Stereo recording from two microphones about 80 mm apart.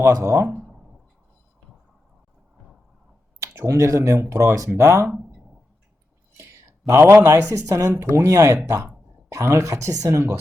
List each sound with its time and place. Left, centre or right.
0.0 s speech: right
3.4 s speech: right
4.8 s speech: right
6.3 s speech: right